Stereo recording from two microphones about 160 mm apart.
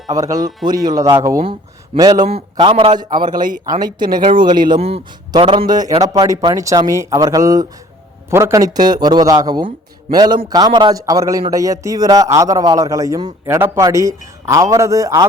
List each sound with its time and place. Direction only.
0.1 s a man's voice: 20° right (ahead or behind)
3.2 s speech: 60° right (ahead or behind)
3.8 s a man's voice: 25° right (ahead or behind)